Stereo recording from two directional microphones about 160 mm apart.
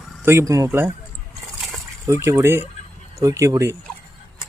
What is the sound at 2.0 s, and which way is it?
Speech, 20° right (ahead or behind).